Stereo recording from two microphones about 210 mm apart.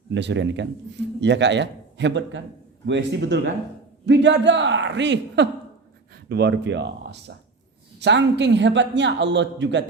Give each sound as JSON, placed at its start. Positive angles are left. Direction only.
{"t": 0.1, "sound": "a woman's voice", "side_deg": -55}